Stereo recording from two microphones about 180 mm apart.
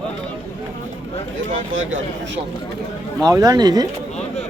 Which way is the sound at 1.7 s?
90° right.